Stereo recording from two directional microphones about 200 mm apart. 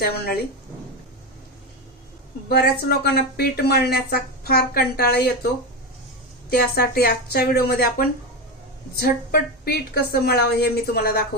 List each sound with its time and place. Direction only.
0.0 s speech: 50° left (ahead or behind)
2.5 s speech: 55° left (ahead or behind)
6.7 s speech: 50° left (ahead or behind)